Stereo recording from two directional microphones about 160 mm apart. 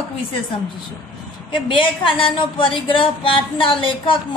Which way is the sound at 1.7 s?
30° left (ahead or behind).